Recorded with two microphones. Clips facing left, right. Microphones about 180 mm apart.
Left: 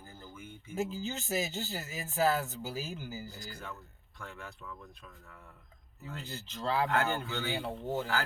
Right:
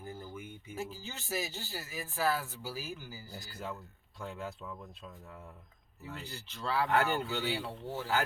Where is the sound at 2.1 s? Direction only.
20° left (ahead or behind).